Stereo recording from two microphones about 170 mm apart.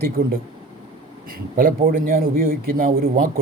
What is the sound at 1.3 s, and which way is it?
A man's voice, 55° right (ahead or behind).